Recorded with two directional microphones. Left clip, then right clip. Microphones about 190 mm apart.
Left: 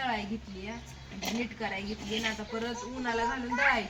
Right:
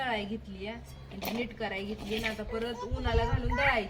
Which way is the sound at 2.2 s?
35° right (ahead or behind).